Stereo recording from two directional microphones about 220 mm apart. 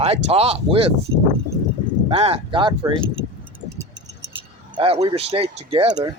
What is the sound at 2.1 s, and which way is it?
Speech, 25° right (ahead or behind).